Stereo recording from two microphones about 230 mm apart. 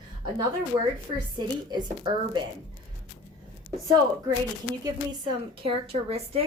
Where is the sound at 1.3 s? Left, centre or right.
Centre.